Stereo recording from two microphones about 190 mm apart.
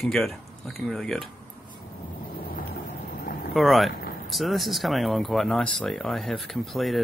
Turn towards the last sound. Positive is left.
turn(degrees=0)  # may be behind; listen again after turning